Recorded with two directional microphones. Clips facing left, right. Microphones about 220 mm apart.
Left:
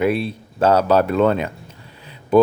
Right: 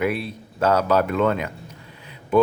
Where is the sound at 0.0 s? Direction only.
30° left (ahead or behind).